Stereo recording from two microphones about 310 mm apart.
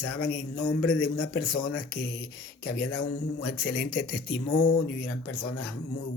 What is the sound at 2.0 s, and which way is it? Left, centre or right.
Speech, left.